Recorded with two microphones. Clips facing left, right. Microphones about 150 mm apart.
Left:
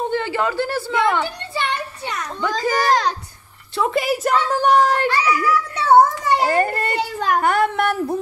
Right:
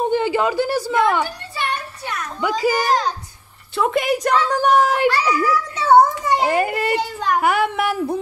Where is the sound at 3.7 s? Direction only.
Centre (ahead or behind).